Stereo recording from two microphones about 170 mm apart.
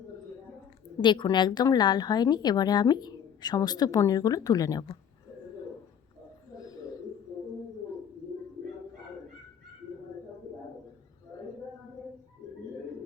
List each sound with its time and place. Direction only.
1.0 s a woman's voice: 25° left (ahead or behind)